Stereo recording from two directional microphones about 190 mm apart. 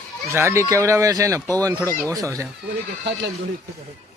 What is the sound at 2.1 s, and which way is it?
Speech, 15° right (ahead or behind).